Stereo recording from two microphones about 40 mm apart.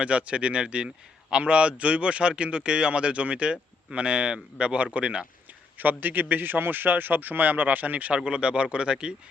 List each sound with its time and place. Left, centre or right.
0.0 s a man's voice: right
5.7 s a man's voice: right
8.1 s a man's voice: right